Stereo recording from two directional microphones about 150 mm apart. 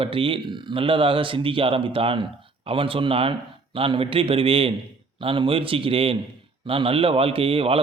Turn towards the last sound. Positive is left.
turn(degrees=-40)  # may be behind; listen again after turning